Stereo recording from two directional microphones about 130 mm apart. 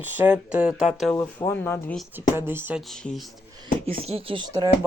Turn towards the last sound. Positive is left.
turn(degrees=-30)  # may be behind; listen again after turning